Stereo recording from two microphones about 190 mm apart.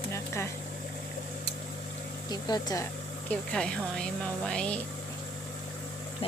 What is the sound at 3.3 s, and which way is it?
Speech, 5° left (ahead or behind).